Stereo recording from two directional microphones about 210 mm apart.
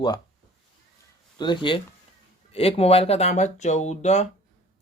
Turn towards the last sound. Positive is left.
turn(degrees=30)  # may be behind; listen again after turning